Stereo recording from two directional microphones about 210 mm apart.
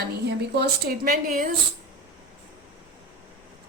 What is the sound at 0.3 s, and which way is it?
A woman's voice, 50° right (ahead or behind).